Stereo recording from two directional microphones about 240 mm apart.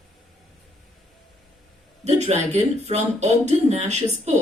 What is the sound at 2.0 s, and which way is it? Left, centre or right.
Speech, right.